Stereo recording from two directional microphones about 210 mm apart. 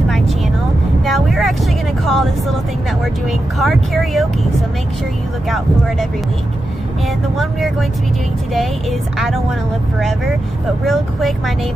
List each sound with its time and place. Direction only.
1.0 s vehicle: centre (ahead or behind)
3.3 s speech: centre (ahead or behind)
10.9 s speech: centre (ahead or behind)